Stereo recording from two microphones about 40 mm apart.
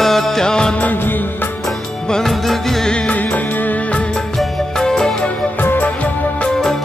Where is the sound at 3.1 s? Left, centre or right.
Left.